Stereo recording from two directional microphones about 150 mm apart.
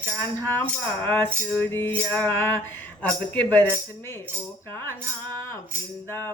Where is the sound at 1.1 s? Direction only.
10° left (ahead or behind).